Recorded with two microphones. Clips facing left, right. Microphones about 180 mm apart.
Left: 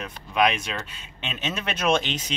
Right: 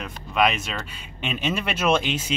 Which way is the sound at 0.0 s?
Centre (ahead or behind).